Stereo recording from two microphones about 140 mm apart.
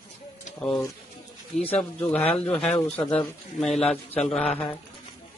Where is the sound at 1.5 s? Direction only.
55° left (ahead or behind).